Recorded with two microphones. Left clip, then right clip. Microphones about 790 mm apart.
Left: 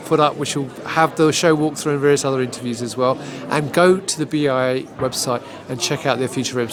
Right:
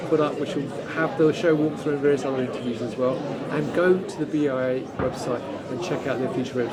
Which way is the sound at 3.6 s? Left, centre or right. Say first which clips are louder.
Left 6 dB; left.